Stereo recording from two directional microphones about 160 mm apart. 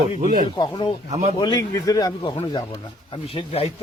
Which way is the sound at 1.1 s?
45° right (ahead or behind).